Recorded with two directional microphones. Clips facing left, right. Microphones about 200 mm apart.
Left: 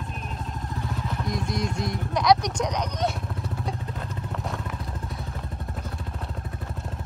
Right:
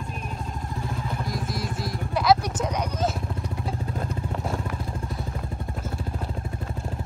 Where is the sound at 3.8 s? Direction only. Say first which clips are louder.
Right 4 dB; 45° right (ahead or behind).